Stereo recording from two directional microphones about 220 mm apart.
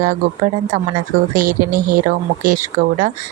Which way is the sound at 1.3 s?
40° right (ahead or behind).